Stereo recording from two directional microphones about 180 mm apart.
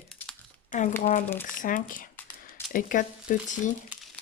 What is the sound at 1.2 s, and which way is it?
Speech, 10° left (ahead or behind).